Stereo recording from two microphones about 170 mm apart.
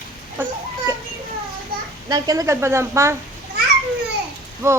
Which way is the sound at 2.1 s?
20° right (ahead or behind).